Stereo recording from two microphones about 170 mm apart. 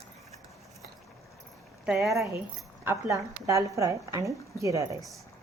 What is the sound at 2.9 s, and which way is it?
A woman's voice, 20° right (ahead or behind).